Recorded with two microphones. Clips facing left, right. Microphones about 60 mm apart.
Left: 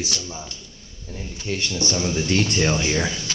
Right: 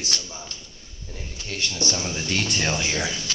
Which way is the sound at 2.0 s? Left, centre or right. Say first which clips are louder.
Left 5 dB; centre.